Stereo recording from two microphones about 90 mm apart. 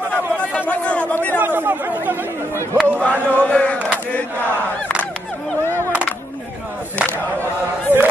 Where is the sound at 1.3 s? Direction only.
25° right (ahead or behind).